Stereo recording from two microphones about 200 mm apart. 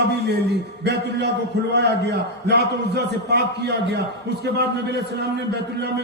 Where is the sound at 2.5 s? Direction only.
55° right (ahead or behind).